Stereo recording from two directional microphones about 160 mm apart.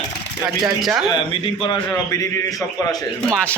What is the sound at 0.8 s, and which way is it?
Speech, centre (ahead or behind).